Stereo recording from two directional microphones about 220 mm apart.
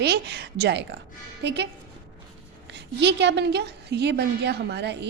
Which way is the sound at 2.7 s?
50° right (ahead or behind).